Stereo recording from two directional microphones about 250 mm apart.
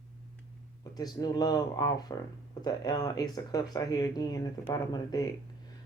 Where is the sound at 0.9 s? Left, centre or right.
Centre.